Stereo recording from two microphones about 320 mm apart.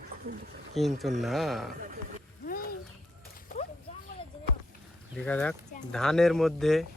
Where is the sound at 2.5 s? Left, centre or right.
Left.